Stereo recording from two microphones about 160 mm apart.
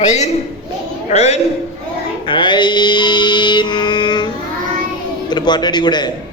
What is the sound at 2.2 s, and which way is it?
Music, 30° left (ahead or behind).